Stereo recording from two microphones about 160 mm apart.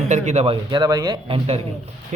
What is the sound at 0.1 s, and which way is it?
Speech, 45° right (ahead or behind).